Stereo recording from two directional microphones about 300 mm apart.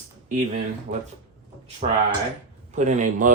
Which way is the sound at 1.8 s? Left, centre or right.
Right.